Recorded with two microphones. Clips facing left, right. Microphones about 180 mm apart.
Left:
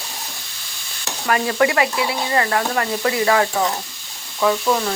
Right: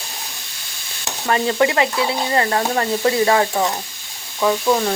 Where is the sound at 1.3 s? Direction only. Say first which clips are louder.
Right 1 dB; 25° right (ahead or behind).